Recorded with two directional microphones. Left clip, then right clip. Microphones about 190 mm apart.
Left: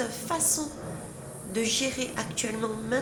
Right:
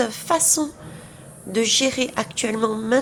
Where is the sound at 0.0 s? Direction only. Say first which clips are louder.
Right 9 dB; 45° right (ahead or behind).